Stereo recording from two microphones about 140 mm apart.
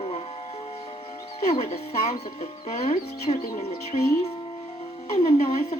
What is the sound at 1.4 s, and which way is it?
Speech, 45° left (ahead or behind).